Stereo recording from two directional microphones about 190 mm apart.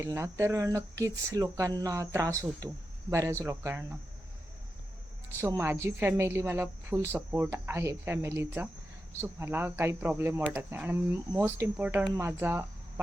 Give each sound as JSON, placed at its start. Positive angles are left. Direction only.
{"t": 0.0, "sound": "speech", "side_deg": -15}
{"t": 5.4, "sound": "speech", "side_deg": -15}